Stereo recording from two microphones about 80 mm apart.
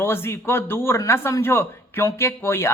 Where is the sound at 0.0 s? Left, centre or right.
Left.